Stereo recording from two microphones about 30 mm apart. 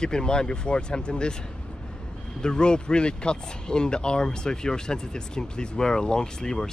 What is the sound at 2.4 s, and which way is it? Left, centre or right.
Speech, left.